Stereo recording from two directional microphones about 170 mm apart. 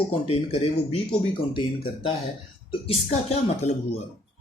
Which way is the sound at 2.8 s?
35° left (ahead or behind).